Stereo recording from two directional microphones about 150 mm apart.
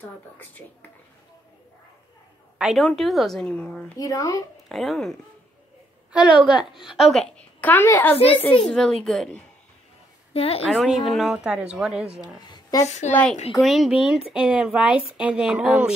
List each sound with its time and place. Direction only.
2.6 s speech: centre (ahead or behind)
4.0 s speech: 20° left (ahead or behind)
4.6 s speech: centre (ahead or behind)
6.1 s a woman's voice: 5° right (ahead or behind)
10.3 s a woman's voice: 40° left (ahead or behind)
10.7 s speech: 5° right (ahead or behind)
12.8 s a woman's voice: 50° left (ahead or behind)
13.1 s a woman's voice: 5° left (ahead or behind)